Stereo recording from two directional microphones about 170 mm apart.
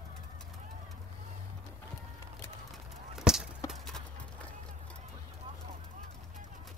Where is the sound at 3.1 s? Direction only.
Centre (ahead or behind).